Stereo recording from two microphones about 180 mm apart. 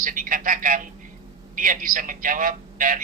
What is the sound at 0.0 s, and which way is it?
Telephone, 50° right (ahead or behind).